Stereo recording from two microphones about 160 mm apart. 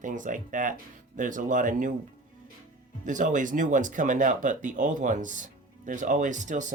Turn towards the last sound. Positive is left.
turn(degrees=-50)  # may be behind; listen again after turning